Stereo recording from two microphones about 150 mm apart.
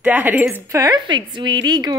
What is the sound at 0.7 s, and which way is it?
A woman's voice, 25° right (ahead or behind).